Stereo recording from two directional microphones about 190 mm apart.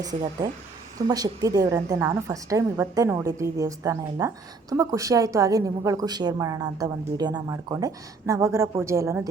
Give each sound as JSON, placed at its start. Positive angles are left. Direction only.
{"t": 0.0, "sound": "a woman's voice", "side_deg": -20}